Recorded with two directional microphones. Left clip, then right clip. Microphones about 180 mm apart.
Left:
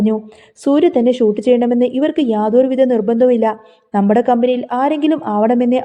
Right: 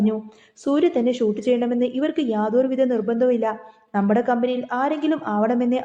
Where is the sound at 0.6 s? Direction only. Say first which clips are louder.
Left 7 dB; 40° left (ahead or behind).